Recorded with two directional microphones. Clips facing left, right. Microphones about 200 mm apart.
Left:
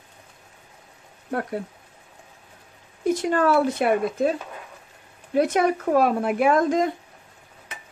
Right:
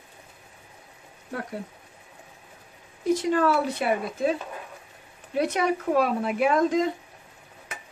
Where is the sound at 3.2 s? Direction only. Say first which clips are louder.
Left 4 dB; 55° left (ahead or behind).